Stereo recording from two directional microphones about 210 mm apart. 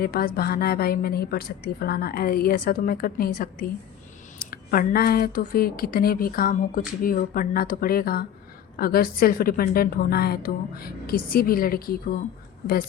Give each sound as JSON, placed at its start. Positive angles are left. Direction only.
{"t": 0.0, "sound": "speech", "side_deg": 45}